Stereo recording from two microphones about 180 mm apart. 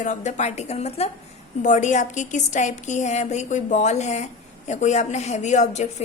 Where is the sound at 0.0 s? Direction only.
40° left (ahead or behind).